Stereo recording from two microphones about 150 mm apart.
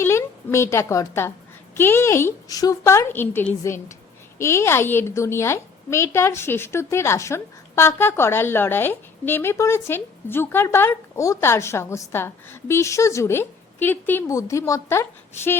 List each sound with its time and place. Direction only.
0.0 s a woman's voice: 20° left (ahead or behind)